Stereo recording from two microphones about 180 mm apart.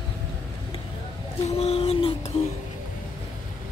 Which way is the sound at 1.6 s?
35° left (ahead or behind).